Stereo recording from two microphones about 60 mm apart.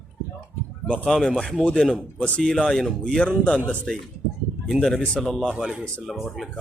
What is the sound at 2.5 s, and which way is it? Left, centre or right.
Speech, centre.